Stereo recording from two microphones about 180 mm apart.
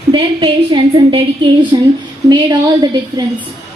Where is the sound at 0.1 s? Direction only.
30° right (ahead or behind).